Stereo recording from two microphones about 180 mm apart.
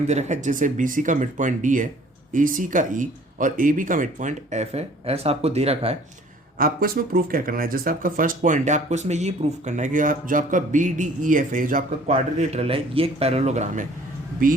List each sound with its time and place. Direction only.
0.1 s speech: 40° right (ahead or behind)
6.6 s speech: 55° right (ahead or behind)
14.4 s speech: 50° right (ahead or behind)